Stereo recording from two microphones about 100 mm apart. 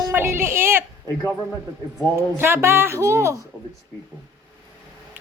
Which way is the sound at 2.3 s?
25° right (ahead or behind).